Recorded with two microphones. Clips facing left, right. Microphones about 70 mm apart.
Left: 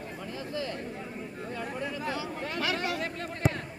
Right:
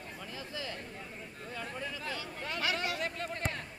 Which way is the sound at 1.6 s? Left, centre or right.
Left.